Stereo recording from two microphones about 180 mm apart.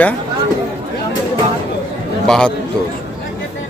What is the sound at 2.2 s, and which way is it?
Speech, 5° left (ahead or behind).